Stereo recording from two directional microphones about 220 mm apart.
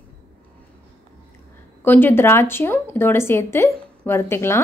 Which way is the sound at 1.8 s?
10° left (ahead or behind).